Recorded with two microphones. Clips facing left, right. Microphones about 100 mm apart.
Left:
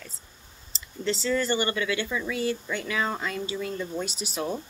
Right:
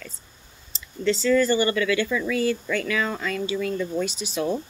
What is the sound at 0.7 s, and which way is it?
Speech, 30° left (ahead or behind).